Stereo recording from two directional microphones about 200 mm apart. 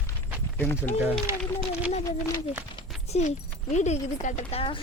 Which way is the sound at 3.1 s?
35° left (ahead or behind).